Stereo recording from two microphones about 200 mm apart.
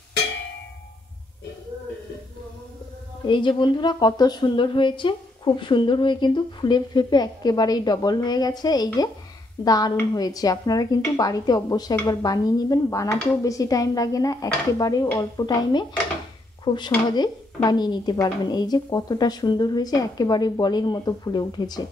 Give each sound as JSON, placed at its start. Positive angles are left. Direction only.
{"t": 3.3, "sound": "a woman's voice", "side_deg": 25}